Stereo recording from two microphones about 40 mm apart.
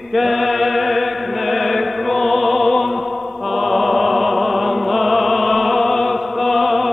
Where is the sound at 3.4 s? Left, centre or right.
Centre.